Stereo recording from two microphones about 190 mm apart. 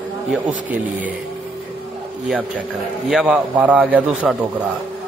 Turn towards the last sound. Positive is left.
turn(degrees=-10)  # may be behind; listen again after turning